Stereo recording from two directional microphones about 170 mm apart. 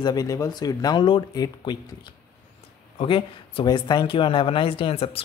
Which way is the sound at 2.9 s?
30° left (ahead or behind).